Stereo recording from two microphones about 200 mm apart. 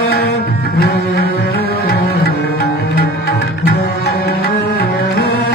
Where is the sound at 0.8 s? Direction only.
55° left (ahead or behind).